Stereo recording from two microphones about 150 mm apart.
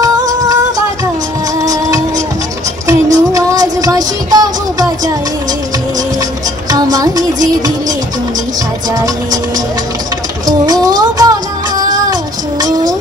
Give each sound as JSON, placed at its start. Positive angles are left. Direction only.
{"t": 0.0, "sound": "music", "side_deg": -25}
{"t": 1.6, "sound": "music", "side_deg": -25}
{"t": 6.7, "sound": "music", "side_deg": -25}
{"t": 10.6, "sound": "music", "side_deg": -25}
{"t": 11.8, "sound": "child singing", "side_deg": -25}